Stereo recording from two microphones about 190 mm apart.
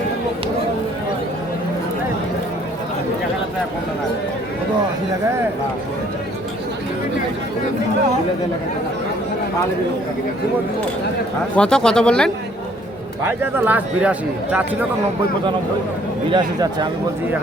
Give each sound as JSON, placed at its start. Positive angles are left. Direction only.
{"t": 11.5, "sound": "speech", "side_deg": 5}
{"t": 13.2, "sound": "a man's voice", "side_deg": -10}
{"t": 16.3, "sound": "speech", "side_deg": -25}